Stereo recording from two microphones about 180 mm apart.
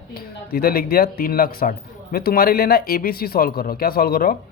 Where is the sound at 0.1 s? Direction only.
55° left (ahead or behind).